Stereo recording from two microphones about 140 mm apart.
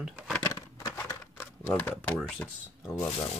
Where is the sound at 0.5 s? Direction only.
25° left (ahead or behind).